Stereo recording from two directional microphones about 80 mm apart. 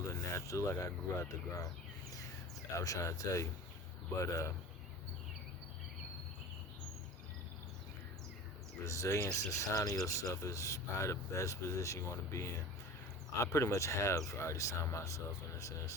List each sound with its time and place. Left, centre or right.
0.1 s speech: left
2.7 s speech: left
8.8 s speech: left